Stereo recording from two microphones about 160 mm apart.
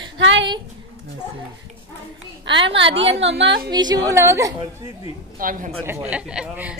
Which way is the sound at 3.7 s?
25° right (ahead or behind).